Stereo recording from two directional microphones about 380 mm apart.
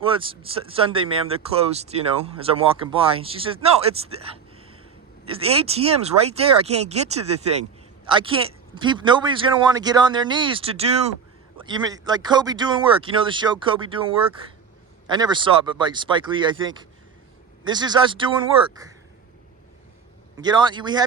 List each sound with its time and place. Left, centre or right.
0.0 s speech: centre
8.0 s speech: centre
15.0 s speech: centre
20.3 s speech: centre